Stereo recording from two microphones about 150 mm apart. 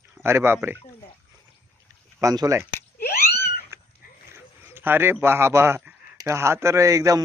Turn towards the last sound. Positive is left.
turn(degrees=-20)  # may be behind; listen again after turning